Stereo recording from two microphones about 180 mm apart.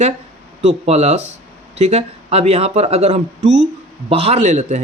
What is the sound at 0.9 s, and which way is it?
Speech, 35° right (ahead or behind).